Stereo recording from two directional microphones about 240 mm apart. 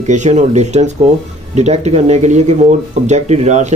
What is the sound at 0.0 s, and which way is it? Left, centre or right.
Speech, right.